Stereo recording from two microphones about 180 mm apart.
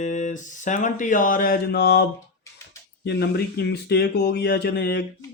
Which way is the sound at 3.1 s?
65° left (ahead or behind).